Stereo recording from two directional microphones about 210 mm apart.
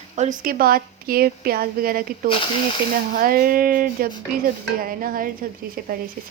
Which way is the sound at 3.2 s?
40° right (ahead or behind).